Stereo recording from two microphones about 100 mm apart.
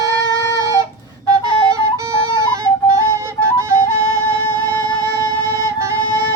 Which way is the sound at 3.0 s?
30° right (ahead or behind).